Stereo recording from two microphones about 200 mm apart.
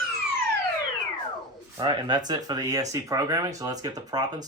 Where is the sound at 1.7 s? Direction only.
20° right (ahead or behind).